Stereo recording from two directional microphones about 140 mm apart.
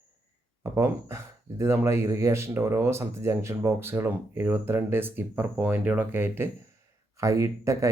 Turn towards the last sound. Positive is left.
turn(degrees=-20)  # may be behind; listen again after turning